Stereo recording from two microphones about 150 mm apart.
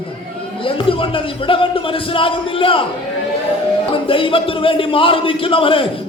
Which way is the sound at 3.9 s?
35° left (ahead or behind).